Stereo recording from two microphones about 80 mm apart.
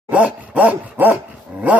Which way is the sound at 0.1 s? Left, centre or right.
Centre.